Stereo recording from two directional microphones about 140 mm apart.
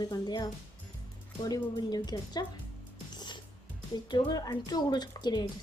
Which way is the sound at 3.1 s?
30° left (ahead or behind).